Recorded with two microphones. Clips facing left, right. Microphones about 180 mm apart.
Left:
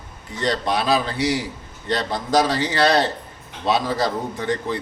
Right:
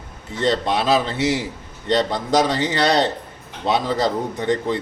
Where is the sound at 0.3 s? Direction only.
20° right (ahead or behind).